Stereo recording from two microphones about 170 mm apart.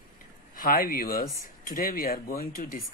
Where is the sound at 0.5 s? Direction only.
55° left (ahead or behind).